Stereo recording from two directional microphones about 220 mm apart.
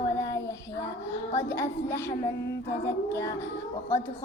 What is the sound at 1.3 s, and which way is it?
Speech, 10° left (ahead or behind).